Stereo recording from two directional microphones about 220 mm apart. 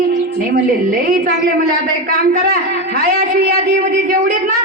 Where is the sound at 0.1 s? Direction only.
45° right (ahead or behind).